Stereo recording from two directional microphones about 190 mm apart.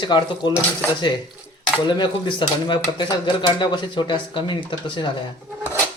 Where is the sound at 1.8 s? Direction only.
25° left (ahead or behind).